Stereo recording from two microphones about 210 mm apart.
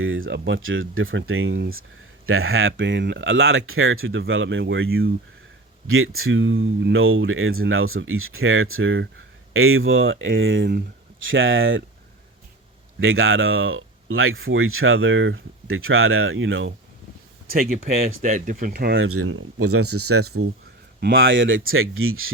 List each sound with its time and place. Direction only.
0.0 s speech: 70° right (ahead or behind)
2.2 s speech: 80° right; by 10.8 s 55° right (ahead or behind)
11.3 s speech: 70° right (ahead or behind)
13.0 s speech: 70° right (ahead or behind)
17.5 s speech: 45° right (ahead or behind)
18.9 s speech: 90° right
21.0 s speech: 60° right (ahead or behind); by 22.3 s 75° right (ahead or behind)